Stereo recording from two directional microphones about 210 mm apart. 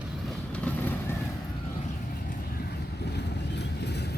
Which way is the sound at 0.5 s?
5° left (ahead or behind).